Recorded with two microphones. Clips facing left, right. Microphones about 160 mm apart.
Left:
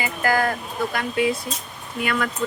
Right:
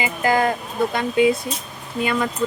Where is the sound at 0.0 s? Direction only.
20° right (ahead or behind).